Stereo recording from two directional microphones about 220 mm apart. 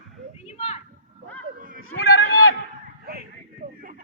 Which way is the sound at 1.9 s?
70° left (ahead or behind).